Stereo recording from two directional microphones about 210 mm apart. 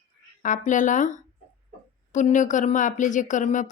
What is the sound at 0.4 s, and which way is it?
Speech, 35° left (ahead or behind).